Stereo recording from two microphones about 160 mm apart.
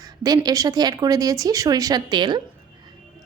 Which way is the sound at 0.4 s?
25° right (ahead or behind).